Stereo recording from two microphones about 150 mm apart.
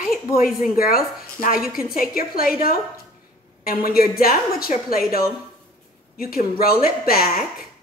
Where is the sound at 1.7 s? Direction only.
5° right (ahead or behind).